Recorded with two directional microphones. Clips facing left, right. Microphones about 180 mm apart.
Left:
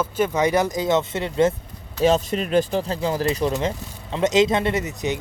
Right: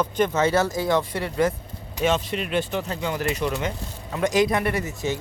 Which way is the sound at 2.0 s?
35° left (ahead or behind).